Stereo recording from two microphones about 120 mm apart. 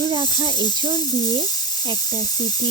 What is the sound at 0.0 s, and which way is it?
Speech, 35° right (ahead or behind).